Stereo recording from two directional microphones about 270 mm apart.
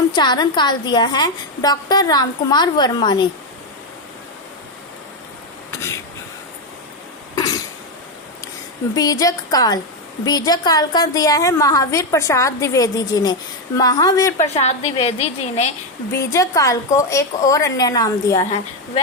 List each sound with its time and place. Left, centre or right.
0.1 s a woman's voice: centre
7.3 s cough: centre
9.0 s a woman's voice: centre
14.3 s a woman's voice: left
16.3 s a woman's voice: centre